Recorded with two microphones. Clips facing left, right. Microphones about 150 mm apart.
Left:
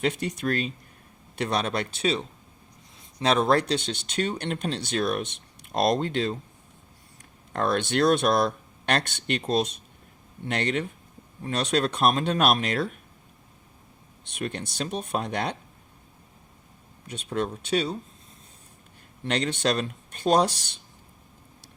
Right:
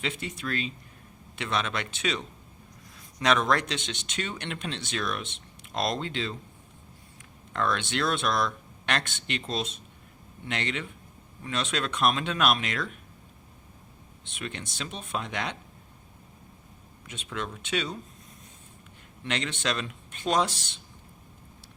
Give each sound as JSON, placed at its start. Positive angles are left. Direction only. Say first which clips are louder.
{"t": 0.0, "sound": "speech", "louder": "left 7 dB", "side_deg": 45}
{"t": 7.5, "sound": "speech", "louder": "left 4 dB", "side_deg": 40}
{"t": 14.3, "sound": "speech", "louder": "left 6 dB", "side_deg": 40}
{"t": 17.1, "sound": "speech", "louder": "left 7 dB", "side_deg": 35}
{"t": 19.2, "sound": "speech", "louder": "left 5 dB", "side_deg": 40}